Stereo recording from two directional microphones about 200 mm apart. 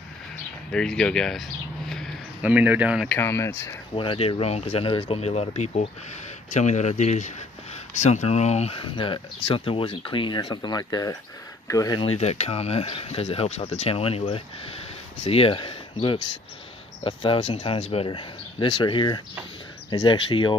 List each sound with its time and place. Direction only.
0.7 s speech: 5° left (ahead or behind)
3.2 s speech: 15° left (ahead or behind)
3.9 s speech: 25° left (ahead or behind)
12.2 s speech: 30° left (ahead or behind)